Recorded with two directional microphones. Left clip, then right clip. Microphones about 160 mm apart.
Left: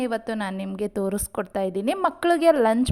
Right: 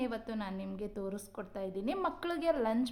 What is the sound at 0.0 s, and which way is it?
A woman's voice, 50° left (ahead or behind).